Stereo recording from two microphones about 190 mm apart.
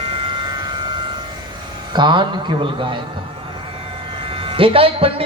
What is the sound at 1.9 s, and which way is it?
A man's voice, 25° right (ahead or behind).